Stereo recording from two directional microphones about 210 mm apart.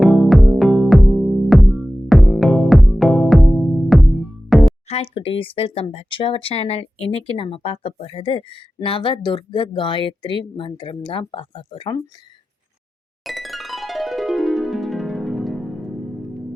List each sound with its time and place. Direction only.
0.0 s music: centre (ahead or behind)
4.9 s speech: 30° left (ahead or behind)
13.2 s music: centre (ahead or behind)